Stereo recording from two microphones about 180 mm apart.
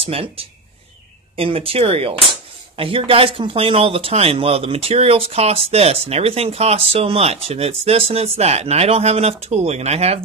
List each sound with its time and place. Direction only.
0.0 s speech: 30° right (ahead or behind)